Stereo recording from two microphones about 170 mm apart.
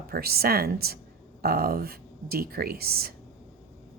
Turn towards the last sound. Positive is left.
turn(degrees=-65)  # may be behind; listen again after turning